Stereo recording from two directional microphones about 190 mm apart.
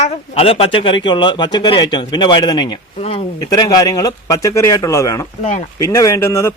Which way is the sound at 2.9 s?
35° left (ahead or behind).